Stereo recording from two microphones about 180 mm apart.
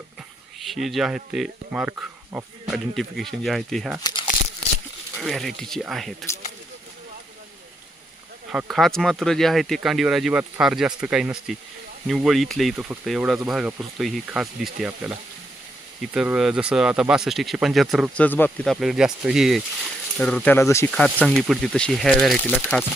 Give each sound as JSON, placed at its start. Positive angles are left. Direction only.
{"t": 0.6, "sound": "speech", "side_deg": 0}
{"t": 4.0, "sound": "crumpling", "side_deg": 25}
{"t": 5.2, "sound": "speech", "side_deg": 0}
{"t": 8.5, "sound": "speech", "side_deg": 0}
{"t": 16.1, "sound": "speech", "side_deg": -5}
{"t": 20.9, "sound": "speech", "side_deg": 5}